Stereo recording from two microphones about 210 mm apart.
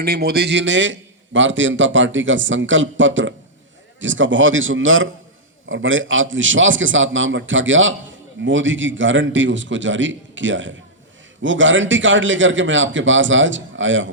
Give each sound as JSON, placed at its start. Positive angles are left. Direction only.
{"t": 0.0, "sound": "a man's voice", "side_deg": -45}